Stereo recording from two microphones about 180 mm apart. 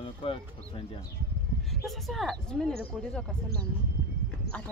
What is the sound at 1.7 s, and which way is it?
Speech, centre (ahead or behind).